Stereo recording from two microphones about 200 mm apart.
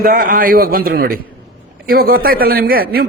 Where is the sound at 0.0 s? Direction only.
45° right (ahead or behind).